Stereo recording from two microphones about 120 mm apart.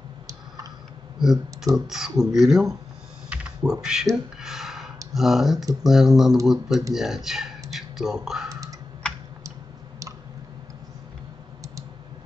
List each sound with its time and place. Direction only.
1.2 s speech: 5° right (ahead or behind)
3.3 s typing: 10° right (ahead or behind)
3.8 s speech: 5° right (ahead or behind)
4.4 s a sound: 5° right (ahead or behind)
5.1 s speech: centre (ahead or behind)
7.7 s a sound: centre (ahead or behind)
8.5 s computer keyboard: 30° right (ahead or behind)